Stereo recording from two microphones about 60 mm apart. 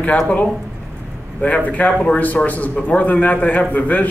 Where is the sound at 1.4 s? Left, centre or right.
Left.